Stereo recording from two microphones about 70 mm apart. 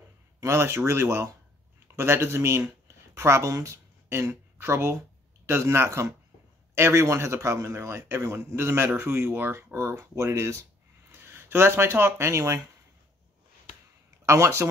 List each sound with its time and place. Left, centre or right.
0.4 s a man's voice: right
14.2 s speech: right